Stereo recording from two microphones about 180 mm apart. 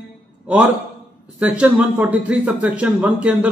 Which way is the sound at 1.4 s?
5° right (ahead or behind).